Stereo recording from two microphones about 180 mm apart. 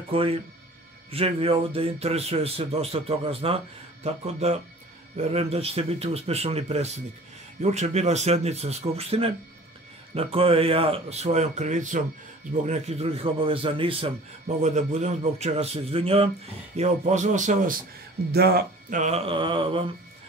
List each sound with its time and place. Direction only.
0.1 s speech: 30° right (ahead or behind)
14.6 s speech: 40° right (ahead or behind)
18.3 s speech: 60° right (ahead or behind)
18.9 s mantra: 35° right (ahead or behind)